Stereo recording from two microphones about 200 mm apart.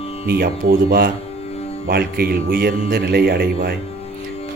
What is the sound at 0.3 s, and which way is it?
A man's voice, 50° right (ahead or behind).